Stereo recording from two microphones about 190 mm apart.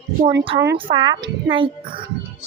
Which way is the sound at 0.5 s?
25° right (ahead or behind).